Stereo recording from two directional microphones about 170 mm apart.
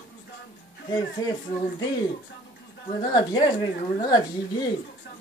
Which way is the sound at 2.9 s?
25° left (ahead or behind).